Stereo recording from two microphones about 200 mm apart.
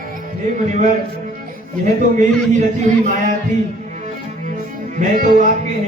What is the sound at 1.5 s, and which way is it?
Speech, 40° right (ahead or behind).